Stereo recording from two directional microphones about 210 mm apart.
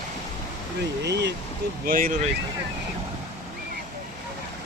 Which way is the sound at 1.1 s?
55° right (ahead or behind).